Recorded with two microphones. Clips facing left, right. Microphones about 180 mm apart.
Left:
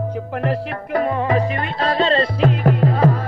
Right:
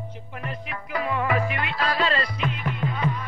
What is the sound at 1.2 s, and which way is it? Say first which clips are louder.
Music: left 6 dB; 30° left (ahead or behind).